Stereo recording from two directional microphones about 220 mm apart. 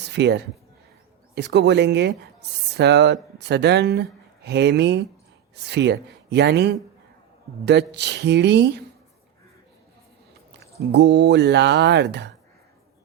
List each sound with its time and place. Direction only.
0.0 s speech: 50° right (ahead or behind)
10.9 s speech: 50° right (ahead or behind)